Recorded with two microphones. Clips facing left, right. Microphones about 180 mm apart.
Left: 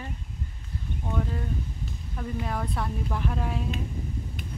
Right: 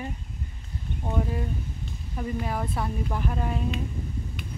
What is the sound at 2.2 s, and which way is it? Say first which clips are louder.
Speech: right 2 dB; 5° right (ahead or behind).